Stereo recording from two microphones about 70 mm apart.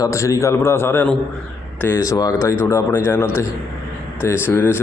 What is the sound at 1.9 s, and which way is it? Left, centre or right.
A man's voice, left.